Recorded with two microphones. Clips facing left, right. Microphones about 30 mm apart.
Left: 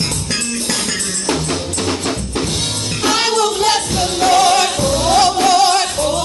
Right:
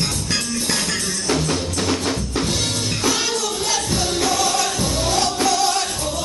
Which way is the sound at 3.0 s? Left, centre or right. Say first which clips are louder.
Left 8 dB; left.